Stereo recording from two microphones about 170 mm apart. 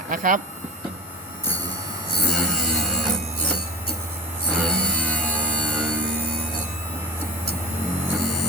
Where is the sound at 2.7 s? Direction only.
Centre (ahead or behind).